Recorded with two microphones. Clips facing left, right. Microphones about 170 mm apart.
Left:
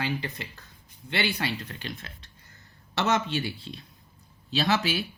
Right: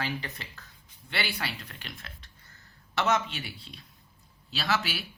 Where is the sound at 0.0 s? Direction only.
20° left (ahead or behind).